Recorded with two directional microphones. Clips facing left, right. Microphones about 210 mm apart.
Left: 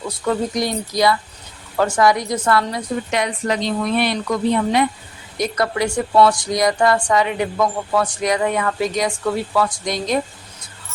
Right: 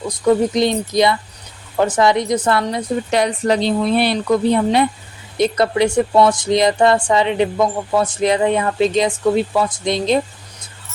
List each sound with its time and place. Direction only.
0.3 s a woman's voice: 25° right (ahead or behind)